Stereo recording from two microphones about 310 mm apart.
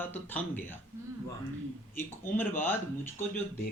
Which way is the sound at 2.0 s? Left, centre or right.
Centre.